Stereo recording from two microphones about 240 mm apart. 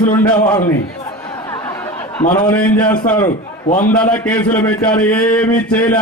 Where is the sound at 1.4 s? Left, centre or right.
Centre.